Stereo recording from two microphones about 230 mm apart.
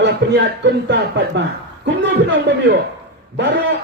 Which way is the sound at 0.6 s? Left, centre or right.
Right.